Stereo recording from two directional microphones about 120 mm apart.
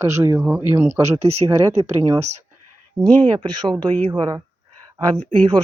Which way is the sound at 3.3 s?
40° right (ahead or behind).